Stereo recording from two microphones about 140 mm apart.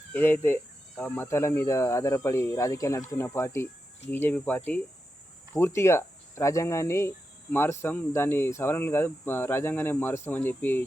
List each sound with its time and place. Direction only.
0.1 s speech: 15° left (ahead or behind)